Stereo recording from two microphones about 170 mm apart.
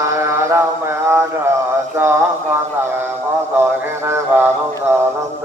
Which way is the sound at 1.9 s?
15° right (ahead or behind).